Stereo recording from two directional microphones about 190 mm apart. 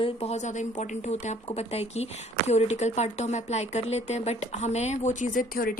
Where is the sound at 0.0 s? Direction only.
30° left (ahead or behind).